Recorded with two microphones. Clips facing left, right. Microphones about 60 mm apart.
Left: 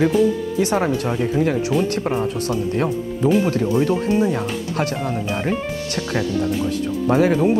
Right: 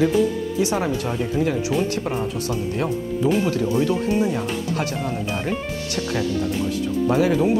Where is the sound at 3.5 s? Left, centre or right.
Left.